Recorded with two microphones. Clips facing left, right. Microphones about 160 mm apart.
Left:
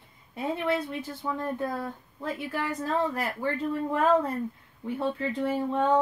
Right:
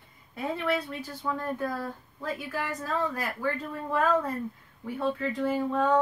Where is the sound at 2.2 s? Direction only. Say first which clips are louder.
Left 2 dB; 25° left (ahead or behind).